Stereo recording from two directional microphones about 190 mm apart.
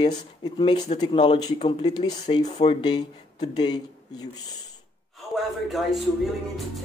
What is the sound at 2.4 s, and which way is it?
Speech, 35° left (ahead or behind).